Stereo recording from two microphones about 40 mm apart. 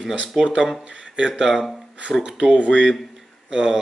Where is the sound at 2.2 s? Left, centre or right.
Centre.